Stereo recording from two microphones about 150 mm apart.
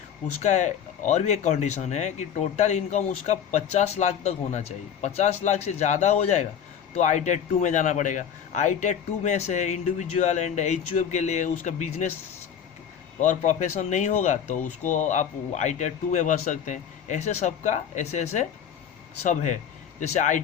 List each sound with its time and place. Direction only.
0.4 s a man's voice: 55° left (ahead or behind)
13.1 s a man's voice: 55° left (ahead or behind)